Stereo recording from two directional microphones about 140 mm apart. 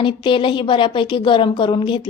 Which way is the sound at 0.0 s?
35° left (ahead or behind).